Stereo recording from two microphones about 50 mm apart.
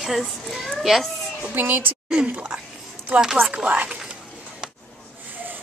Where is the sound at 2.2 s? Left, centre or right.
Right.